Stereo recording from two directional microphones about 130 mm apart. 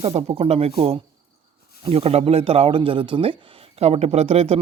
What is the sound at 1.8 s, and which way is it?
Speech, 50° right (ahead or behind).